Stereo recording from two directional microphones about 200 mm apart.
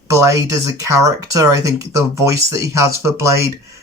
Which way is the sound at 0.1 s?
15° right (ahead or behind).